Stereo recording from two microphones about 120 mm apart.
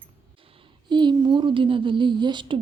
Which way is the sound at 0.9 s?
40° right (ahead or behind).